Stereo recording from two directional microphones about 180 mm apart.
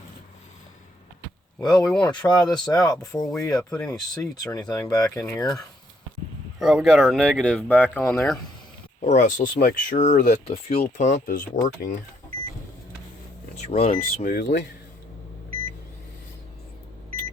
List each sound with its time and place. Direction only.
1.6 s speech: 25° left (ahead or behind)
3.4 s speech: 5° left (ahead or behind)
4.7 s speech: 20° left (ahead or behind)
6.6 s speech: centre (ahead or behind); by 8.3 s 15° left (ahead or behind)
9.0 s speech: 40° left (ahead or behind)
13.7 s speech: 35° left (ahead or behind)
13.9 s speech: 50° left (ahead or behind); by 14.7 s 75° left (ahead or behind)